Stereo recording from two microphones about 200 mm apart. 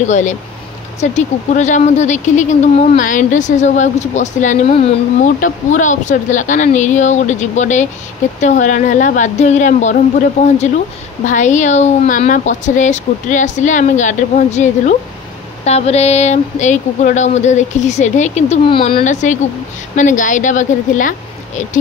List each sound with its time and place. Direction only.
0.1 s speech: 40° left (ahead or behind)